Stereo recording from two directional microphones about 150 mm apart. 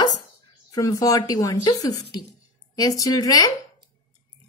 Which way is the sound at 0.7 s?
25° left (ahead or behind).